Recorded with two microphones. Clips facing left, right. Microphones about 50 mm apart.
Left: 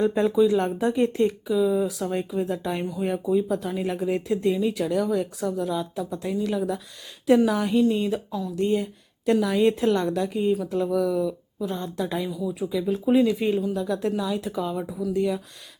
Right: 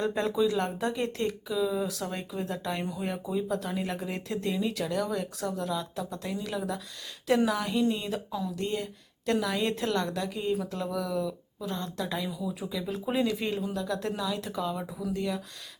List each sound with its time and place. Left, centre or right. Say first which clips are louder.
0.2 s speech: left 6 dB; centre
8.1 s speech: left 4 dB; centre
8.5 s speech: left 8 dB; centre
12.3 s speech: left 7 dB; centre